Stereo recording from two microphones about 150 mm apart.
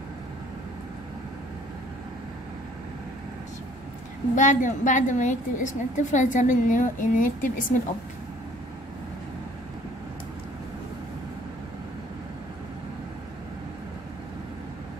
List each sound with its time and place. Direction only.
4.4 s a woman's voice: 55° left (ahead or behind)